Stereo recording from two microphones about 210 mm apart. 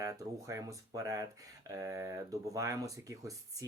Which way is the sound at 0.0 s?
15° right (ahead or behind).